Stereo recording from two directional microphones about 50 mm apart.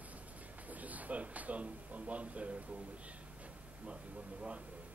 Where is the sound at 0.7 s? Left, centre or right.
Right.